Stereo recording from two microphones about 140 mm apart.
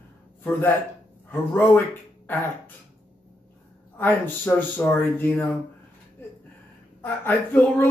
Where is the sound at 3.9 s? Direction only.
15° left (ahead or behind).